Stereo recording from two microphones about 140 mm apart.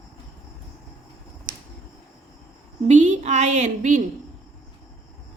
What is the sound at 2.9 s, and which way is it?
A woman's voice, 55° right (ahead or behind).